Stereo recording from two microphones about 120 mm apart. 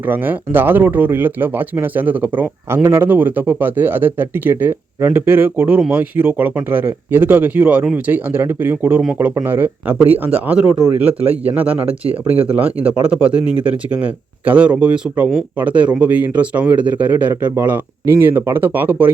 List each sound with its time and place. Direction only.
0.1 s speech: 15° right (ahead or behind)